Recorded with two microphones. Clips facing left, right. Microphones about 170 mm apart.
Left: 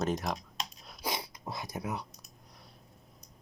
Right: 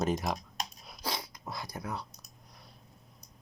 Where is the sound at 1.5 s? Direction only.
20° left (ahead or behind).